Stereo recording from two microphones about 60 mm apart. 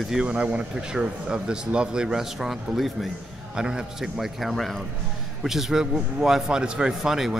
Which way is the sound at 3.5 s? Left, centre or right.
Centre.